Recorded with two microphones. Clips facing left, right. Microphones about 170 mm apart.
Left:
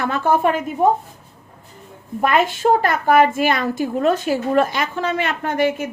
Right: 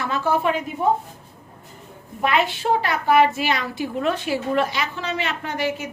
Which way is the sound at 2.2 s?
45° left (ahead or behind).